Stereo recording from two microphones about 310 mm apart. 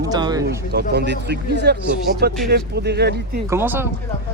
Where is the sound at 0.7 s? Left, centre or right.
Right.